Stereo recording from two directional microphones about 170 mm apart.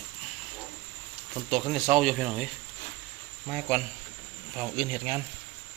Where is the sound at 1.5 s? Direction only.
Centre (ahead or behind).